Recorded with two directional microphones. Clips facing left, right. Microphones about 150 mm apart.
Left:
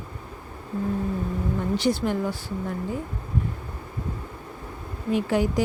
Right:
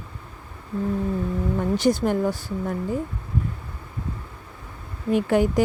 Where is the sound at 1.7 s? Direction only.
45° right (ahead or behind).